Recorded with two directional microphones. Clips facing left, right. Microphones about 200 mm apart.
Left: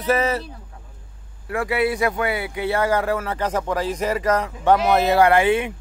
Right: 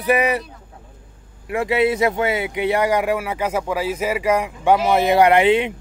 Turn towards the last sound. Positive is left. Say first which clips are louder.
# right 2 dB
turn(degrees=-20)  # may be behind; listen again after turning